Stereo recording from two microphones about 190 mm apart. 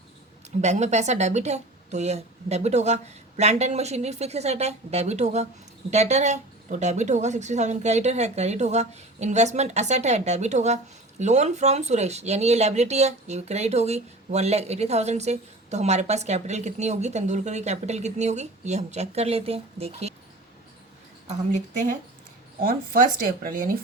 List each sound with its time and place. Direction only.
0.6 s speech: 35° right (ahead or behind)
21.2 s speech: 40° right (ahead or behind)